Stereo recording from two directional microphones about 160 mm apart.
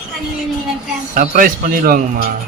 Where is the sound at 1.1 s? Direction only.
55° right (ahead or behind).